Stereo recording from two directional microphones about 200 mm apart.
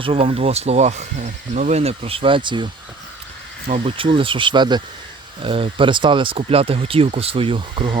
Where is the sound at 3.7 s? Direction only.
30° right (ahead or behind).